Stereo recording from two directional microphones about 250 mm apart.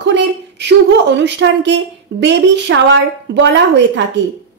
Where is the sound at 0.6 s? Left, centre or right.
Right.